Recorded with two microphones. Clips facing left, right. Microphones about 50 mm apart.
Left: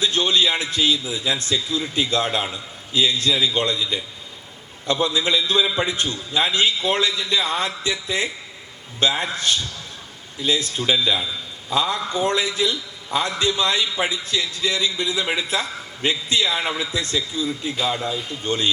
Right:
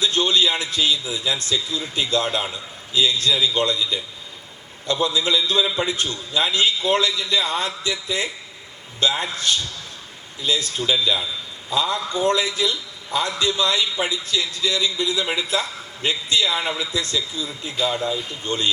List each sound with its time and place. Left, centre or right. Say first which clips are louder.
0.0 s a man's voice: even; left